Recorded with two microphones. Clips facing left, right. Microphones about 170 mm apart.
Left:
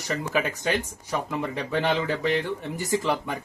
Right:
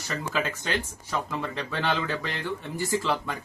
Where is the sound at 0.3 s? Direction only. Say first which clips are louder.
Left 3 dB; 15° left (ahead or behind).